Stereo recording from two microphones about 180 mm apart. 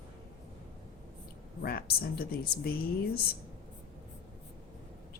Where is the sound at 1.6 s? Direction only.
55° left (ahead or behind).